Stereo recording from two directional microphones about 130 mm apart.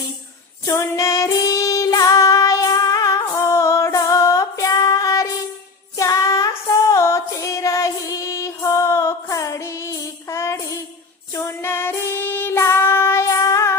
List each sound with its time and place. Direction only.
0.6 s child singing: 25° left (ahead or behind)
6.0 s female singing: 25° left (ahead or behind)
11.3 s child singing: 20° left (ahead or behind)